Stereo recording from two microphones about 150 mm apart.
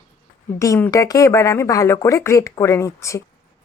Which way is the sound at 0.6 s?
20° left (ahead or behind).